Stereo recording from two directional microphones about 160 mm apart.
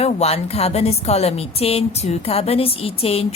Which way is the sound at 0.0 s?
40° left (ahead or behind).